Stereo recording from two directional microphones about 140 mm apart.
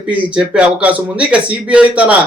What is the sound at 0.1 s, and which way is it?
Speech, 5° right (ahead or behind).